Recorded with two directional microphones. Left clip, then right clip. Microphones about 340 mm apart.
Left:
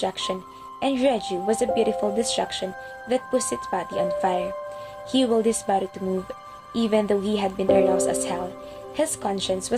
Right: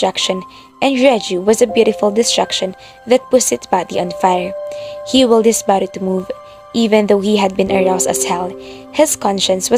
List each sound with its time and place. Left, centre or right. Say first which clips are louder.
0.0 s speech: right 11 dB; right